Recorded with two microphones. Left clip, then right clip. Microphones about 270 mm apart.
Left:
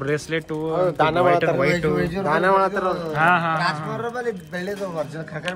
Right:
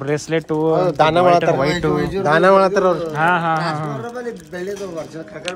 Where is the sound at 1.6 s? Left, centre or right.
Centre.